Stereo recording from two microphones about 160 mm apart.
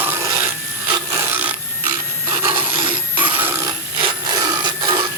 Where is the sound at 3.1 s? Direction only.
10° right (ahead or behind).